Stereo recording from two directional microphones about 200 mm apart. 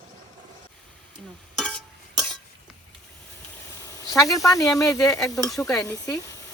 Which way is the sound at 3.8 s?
15° left (ahead or behind).